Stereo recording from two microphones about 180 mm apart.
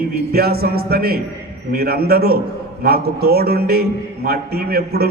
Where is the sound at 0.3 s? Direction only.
60° right (ahead or behind).